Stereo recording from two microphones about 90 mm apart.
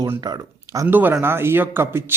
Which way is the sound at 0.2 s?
45° right (ahead or behind).